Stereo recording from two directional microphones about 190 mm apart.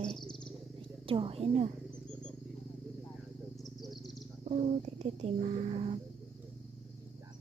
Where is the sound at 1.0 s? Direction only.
30° right (ahead or behind).